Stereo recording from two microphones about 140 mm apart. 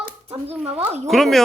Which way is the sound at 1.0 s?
Centre (ahead or behind).